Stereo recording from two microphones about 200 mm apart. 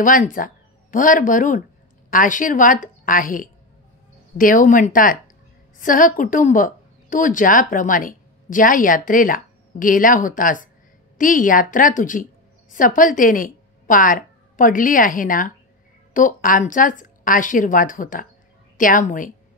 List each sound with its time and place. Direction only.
0.0 s a woman's voice: 40° left (ahead or behind)